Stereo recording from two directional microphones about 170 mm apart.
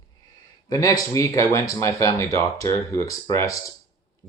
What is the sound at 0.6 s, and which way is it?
Speech, 20° left (ahead or behind).